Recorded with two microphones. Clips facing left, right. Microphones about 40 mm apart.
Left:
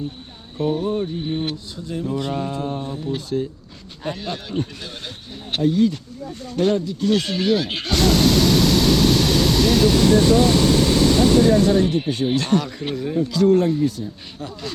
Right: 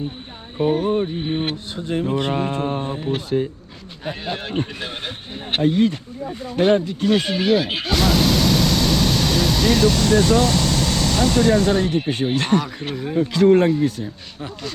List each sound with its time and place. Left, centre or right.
0.9 s speech: right
4.4 s speech: right
6.2 s speech: right
6.7 s speech: right
7.1 s a sound: centre
11.9 s speech: right
12.9 s speech: centre
13.1 s speech: right